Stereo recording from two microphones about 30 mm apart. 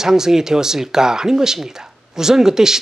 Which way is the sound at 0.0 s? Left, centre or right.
Centre.